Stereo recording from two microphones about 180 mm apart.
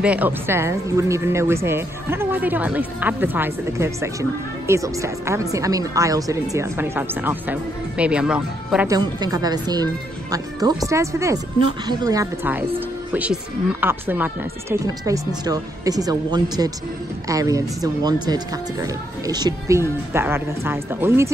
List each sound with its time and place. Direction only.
0.0 s speech: 10° right (ahead or behind)
8.8 s speech: 20° right (ahead or behind)